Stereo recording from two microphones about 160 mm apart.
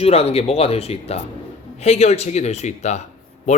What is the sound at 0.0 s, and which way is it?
A man's voice, 40° left (ahead or behind).